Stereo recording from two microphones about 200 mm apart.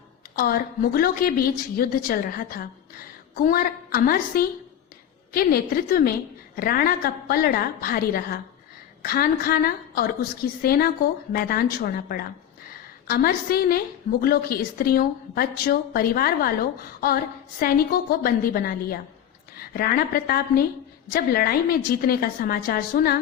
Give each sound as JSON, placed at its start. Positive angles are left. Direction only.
{"t": 0.3, "sound": "a woman's voice", "side_deg": 50}